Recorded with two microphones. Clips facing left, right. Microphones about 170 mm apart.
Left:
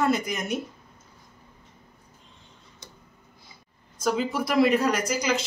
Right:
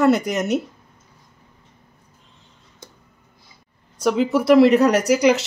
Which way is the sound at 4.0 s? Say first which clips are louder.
Right 7 dB; 70° right (ahead or behind).